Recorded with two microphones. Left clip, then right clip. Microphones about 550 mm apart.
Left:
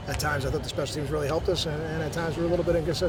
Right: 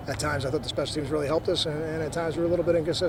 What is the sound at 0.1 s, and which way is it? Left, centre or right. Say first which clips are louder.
A man's voice: even; right.